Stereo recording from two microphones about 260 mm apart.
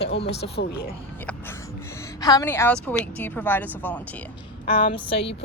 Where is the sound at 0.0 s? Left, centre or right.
Left.